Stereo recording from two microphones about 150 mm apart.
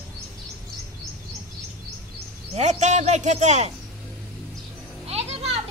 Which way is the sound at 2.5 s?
50° right (ahead or behind).